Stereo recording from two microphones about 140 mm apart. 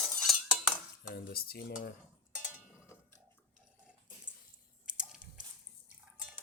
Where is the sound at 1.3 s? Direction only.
90° left.